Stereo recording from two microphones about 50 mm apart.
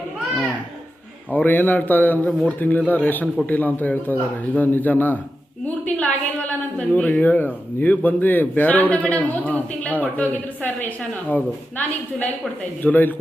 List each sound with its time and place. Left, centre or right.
1.3 s speech: left
5.6 s a sound: left
7.1 s speech: left